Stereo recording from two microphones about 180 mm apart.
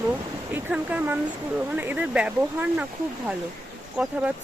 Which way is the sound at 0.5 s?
10° right (ahead or behind).